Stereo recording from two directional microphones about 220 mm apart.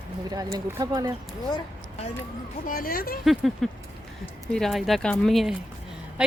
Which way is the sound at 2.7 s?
40° left (ahead or behind).